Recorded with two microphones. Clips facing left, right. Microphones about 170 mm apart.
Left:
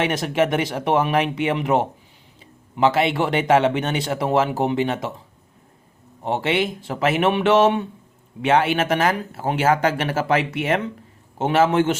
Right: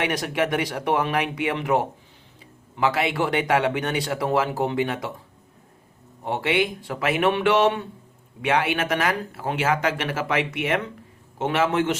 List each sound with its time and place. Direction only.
0.0 s speech: 25° left (ahead or behind)
6.2 s speech: 25° left (ahead or behind)